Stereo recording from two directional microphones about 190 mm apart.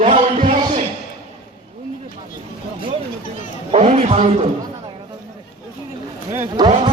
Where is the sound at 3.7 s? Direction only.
35° right (ahead or behind).